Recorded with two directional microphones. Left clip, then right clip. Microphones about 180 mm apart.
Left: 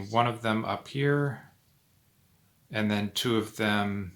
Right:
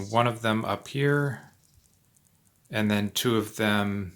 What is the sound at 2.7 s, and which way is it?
Speech, 30° right (ahead or behind).